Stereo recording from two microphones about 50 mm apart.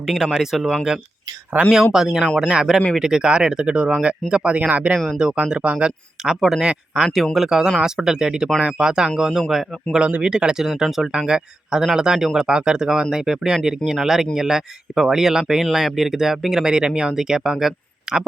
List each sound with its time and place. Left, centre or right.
0.0 s speech: centre
11.3 s speech: centre